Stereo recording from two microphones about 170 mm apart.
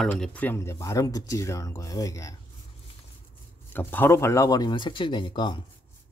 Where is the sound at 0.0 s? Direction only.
5° left (ahead or behind); by 2.3 s 20° left (ahead or behind).